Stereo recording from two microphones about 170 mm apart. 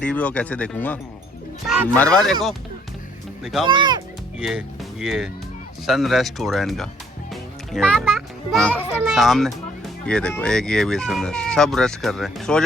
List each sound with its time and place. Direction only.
0.0 s speech: 10° left (ahead or behind)
3.4 s speech: centre (ahead or behind)
3.7 s speech: 25° right (ahead or behind)
4.4 s a child's voice: 5° right (ahead or behind)